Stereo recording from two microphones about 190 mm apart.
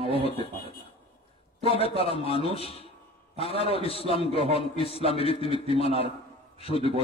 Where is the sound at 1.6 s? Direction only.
30° left (ahead or behind).